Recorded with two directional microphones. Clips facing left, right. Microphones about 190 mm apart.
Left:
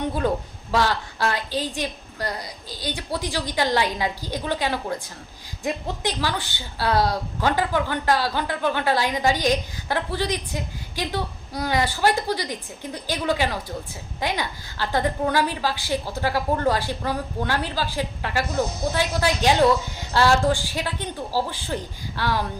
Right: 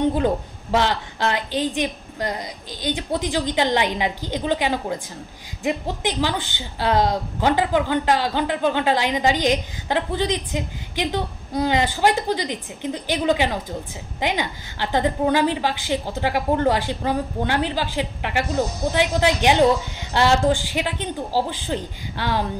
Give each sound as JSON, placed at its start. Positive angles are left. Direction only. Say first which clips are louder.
{"t": 0.1, "sound": "a woman's voice", "louder": "right 3 dB", "side_deg": -20}